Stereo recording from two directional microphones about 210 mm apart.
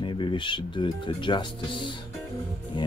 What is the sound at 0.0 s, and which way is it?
Speech, 20° left (ahead or behind).